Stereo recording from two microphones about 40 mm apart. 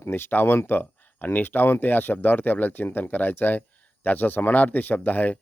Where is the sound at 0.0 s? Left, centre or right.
Left.